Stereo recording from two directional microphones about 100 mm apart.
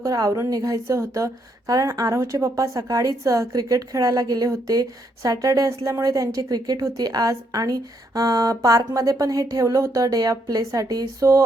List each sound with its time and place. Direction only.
0.0 s a woman's voice: 35° right (ahead or behind)